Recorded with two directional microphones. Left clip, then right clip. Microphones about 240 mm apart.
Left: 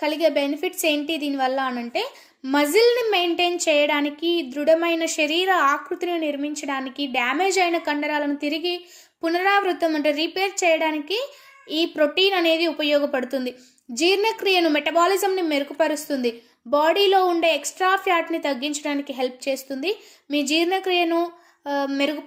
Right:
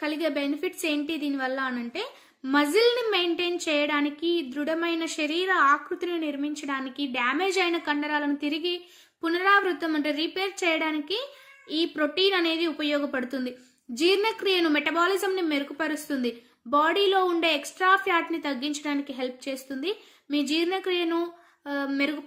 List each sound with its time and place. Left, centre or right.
0.0 s a woman's voice: centre